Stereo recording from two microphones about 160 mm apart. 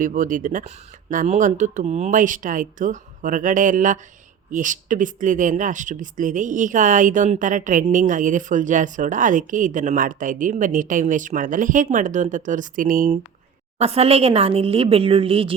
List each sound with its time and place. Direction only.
0.0 s speech: 55° right (ahead or behind)
13.7 s speech: 40° right (ahead or behind)